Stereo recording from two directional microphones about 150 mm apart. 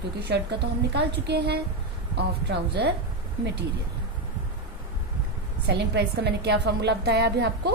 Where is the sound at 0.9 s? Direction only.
90° right.